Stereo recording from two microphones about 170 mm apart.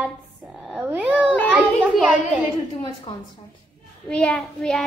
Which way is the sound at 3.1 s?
30° left (ahead or behind).